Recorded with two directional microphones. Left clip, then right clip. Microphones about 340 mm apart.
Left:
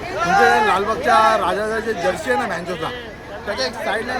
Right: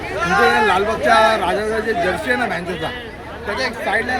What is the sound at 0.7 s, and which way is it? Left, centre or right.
Speech, centre.